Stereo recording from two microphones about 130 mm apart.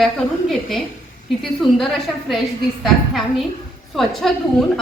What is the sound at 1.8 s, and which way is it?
A woman's voice, centre (ahead or behind).